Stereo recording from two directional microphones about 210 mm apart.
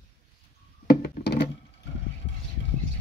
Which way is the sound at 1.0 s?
50° left (ahead or behind).